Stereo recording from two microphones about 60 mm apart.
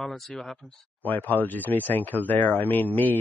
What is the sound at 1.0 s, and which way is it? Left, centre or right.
Speech, left.